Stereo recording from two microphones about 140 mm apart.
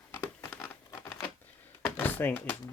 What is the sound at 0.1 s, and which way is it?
Crumpling, 15° left (ahead or behind).